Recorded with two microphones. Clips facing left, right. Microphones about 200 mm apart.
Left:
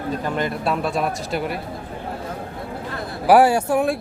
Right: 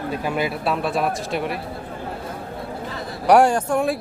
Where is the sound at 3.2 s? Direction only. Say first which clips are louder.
Left 1 dB; 5° left (ahead or behind).